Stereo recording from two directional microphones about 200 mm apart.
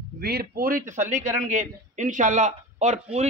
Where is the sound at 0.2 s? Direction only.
50° right (ahead or behind).